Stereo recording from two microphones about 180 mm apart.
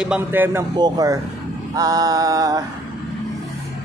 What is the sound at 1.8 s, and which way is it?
Mantra, 20° right (ahead or behind).